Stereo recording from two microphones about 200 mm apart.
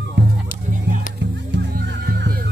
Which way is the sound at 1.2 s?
60° right (ahead or behind).